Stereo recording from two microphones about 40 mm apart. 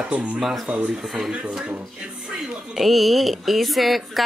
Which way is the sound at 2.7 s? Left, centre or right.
Centre.